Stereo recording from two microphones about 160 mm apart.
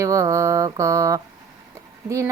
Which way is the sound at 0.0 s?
20° right (ahead or behind).